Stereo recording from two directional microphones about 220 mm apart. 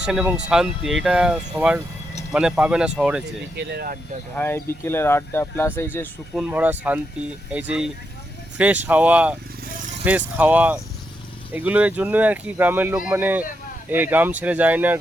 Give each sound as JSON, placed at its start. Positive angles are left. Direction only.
{"t": 0.0, "sound": "speech", "side_deg": -5}
{"t": 3.6, "sound": "speech", "side_deg": -45}
{"t": 4.4, "sound": "speech", "side_deg": 10}
{"t": 6.3, "sound": "speech", "side_deg": -5}